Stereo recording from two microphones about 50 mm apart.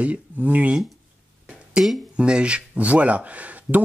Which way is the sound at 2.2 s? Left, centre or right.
Centre.